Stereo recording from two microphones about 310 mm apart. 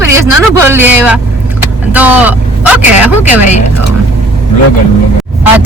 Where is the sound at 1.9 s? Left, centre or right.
Centre.